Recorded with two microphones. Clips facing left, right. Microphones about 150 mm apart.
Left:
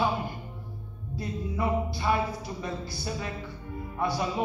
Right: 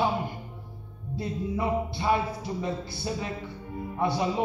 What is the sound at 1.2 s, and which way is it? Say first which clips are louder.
A man's voice: right 2 dB; 25° right (ahead or behind).